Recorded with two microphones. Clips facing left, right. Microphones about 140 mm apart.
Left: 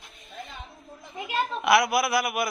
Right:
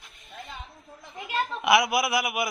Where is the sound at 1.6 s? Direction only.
15° right (ahead or behind).